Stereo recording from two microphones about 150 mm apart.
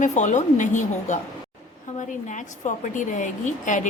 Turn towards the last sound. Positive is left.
turn(degrees=55)  # may be behind; listen again after turning